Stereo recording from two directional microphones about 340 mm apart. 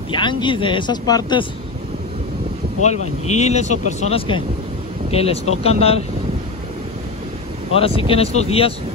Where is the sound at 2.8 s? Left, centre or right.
Centre.